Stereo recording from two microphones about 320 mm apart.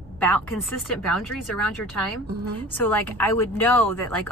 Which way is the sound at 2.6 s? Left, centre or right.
Centre.